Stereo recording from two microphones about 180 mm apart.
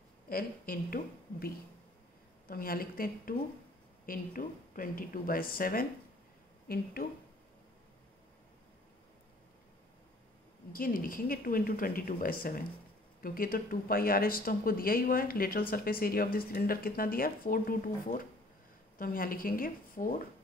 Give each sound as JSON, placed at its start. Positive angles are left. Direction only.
{"t": 0.3, "sound": "a woman's voice", "side_deg": 55}
{"t": 10.7, "sound": "speech", "side_deg": 50}